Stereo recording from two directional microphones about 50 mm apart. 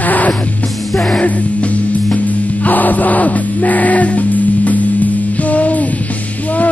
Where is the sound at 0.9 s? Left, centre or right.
Centre.